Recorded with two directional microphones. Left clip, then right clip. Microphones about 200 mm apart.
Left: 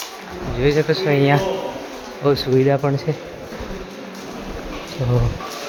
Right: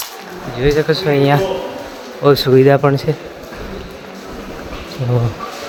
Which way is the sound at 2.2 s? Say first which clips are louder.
Right 7 dB; 20° right (ahead or behind).